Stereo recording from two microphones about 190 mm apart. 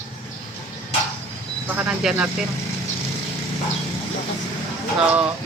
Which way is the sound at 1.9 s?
5° right (ahead or behind).